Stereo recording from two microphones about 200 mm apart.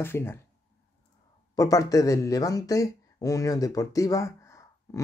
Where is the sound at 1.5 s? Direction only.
15° left (ahead or behind).